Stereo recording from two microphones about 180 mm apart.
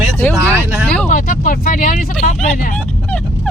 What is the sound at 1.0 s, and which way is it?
Speech, 50° left (ahead or behind).